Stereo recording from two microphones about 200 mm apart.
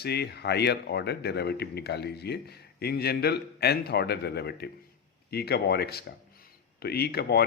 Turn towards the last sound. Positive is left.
turn(degrees=50)  # may be behind; listen again after turning